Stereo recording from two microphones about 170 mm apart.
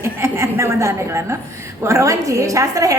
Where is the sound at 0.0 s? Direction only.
15° right (ahead or behind).